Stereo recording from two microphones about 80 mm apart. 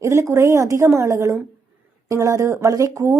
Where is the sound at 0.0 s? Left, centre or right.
Right.